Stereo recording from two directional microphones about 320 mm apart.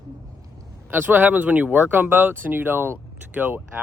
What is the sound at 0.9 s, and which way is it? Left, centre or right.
Speech, centre.